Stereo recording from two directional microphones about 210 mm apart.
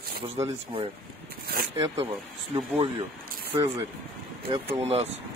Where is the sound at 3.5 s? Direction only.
25° right (ahead or behind).